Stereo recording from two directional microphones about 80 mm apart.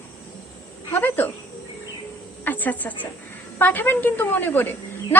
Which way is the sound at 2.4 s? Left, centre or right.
Left.